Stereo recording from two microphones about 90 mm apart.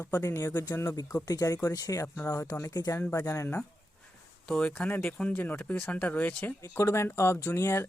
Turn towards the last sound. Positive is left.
turn(degrees=30)  # may be behind; listen again after turning